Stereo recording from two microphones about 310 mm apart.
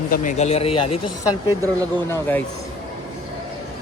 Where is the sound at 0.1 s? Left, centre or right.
Left.